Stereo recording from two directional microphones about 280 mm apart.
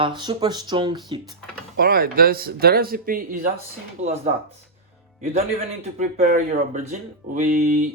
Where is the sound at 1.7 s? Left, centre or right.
Right.